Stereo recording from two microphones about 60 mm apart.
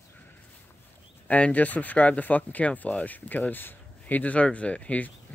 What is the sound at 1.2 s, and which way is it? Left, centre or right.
Speech, left.